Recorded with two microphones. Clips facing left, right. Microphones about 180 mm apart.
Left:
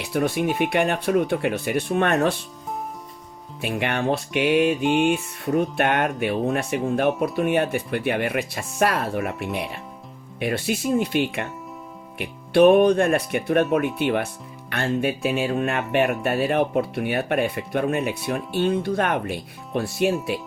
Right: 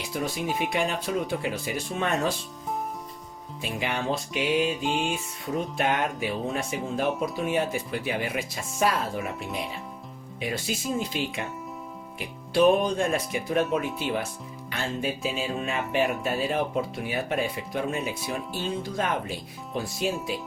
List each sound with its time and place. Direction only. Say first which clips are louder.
0.0 s speech: left 7 dB; 65° left (ahead or behind)
3.6 s speech: left 6 dB; 65° left (ahead or behind)
4.6 s music: left 7 dB; centre (ahead or behind)
5.5 s speech: left 5 dB; 65° left (ahead or behind)